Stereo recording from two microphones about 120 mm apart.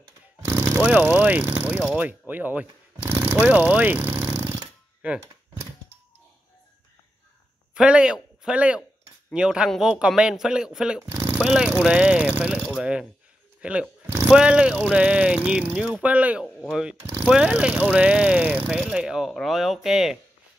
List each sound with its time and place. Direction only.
0.5 s mechanisms: 20° right (ahead or behind)
7.7 s a man's voice: 10° right (ahead or behind)
11.1 s a sound: 20° right (ahead or behind)
11.4 s speech: 10° right (ahead or behind)
13.6 s a sound: 10° right (ahead or behind)
14.3 s a man's voice: 10° right (ahead or behind)